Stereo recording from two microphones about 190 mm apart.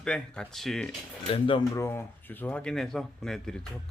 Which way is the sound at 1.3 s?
25° left (ahead or behind).